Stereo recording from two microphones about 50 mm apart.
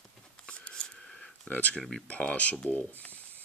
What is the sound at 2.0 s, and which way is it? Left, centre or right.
Speech, left.